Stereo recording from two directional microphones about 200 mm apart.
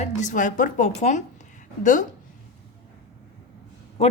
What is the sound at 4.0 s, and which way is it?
Speech, 30° left (ahead or behind).